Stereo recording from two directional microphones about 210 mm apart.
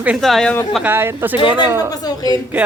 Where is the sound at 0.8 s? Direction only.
10° right (ahead or behind).